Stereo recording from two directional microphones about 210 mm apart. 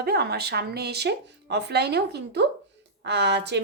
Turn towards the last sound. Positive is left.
turn(degrees=-55)  # may be behind; listen again after turning